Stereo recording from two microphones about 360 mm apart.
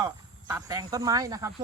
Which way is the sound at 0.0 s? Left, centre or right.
Centre.